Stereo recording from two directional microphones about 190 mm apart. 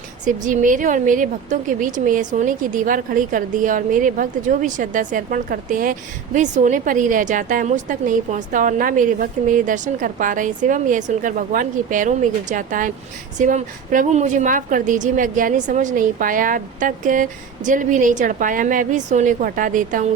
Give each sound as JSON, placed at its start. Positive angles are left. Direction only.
{"t": 0.3, "sound": "a woman's voice", "side_deg": -40}